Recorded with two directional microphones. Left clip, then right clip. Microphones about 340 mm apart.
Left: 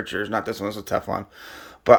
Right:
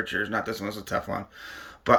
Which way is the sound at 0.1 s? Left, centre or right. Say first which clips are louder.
Left 2 dB; centre.